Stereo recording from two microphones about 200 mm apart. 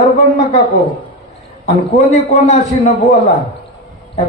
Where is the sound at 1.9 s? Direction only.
30° left (ahead or behind).